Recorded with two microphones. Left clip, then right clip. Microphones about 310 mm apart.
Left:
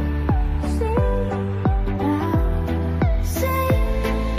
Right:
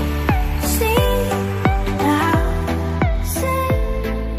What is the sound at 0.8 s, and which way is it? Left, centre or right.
Music, right.